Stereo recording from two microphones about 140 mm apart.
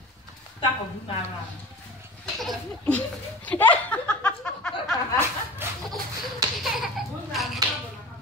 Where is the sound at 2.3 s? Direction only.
5° left (ahead or behind).